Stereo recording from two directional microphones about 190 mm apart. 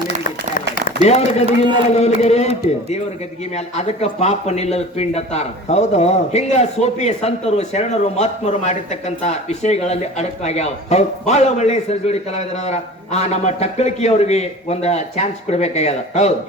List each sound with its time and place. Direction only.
1.0 s speech: 35° left (ahead or behind)
3.5 s speech: 35° left (ahead or behind)